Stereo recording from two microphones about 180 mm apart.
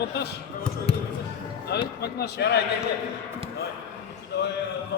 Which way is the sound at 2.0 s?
65° left (ahead or behind).